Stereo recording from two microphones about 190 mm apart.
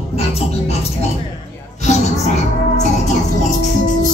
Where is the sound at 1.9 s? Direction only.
35° left (ahead or behind).